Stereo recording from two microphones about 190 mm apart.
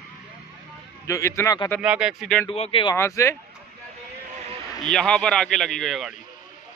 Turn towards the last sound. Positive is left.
turn(degrees=0)  # may be behind; listen again after turning